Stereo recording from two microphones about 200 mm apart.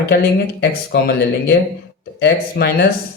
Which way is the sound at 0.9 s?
50° left (ahead or behind).